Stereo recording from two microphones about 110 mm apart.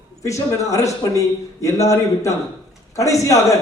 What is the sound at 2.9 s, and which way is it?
Speech, 30° left (ahead or behind).